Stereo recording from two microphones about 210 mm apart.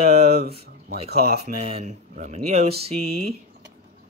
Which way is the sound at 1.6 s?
30° right (ahead or behind).